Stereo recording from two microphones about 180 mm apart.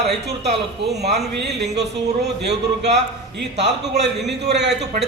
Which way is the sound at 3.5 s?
70° right (ahead or behind).